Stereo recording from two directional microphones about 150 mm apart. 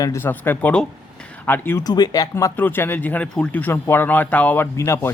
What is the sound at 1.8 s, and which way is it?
Speech, 25° left (ahead or behind).